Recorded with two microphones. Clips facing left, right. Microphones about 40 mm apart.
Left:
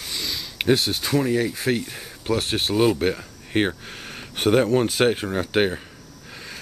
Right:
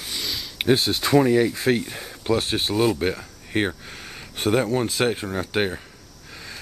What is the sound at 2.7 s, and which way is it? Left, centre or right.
Speech, centre.